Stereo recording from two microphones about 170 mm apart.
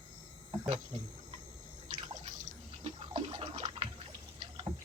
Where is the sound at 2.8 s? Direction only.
35° right (ahead or behind).